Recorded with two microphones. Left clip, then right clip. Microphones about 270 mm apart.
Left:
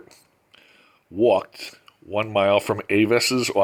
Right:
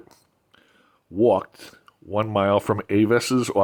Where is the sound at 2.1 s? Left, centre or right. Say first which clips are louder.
Left 1 dB; right.